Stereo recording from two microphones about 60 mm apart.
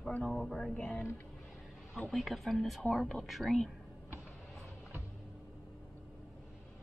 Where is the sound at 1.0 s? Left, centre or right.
Left.